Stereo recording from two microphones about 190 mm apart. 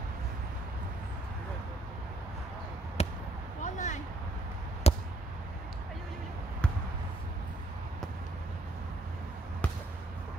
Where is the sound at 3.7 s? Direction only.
40° left (ahead or behind).